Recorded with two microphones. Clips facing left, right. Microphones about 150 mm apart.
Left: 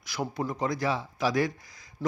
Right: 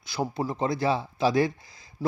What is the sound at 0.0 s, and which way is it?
Speech, 30° right (ahead or behind).